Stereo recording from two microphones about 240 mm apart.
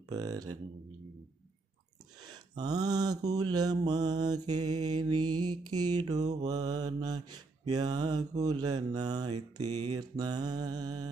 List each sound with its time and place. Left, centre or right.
0.1 s mantra: centre
2.3 s a sound: centre
3.5 s mantra: centre
5.3 s mantra: right
5.7 s mantra: centre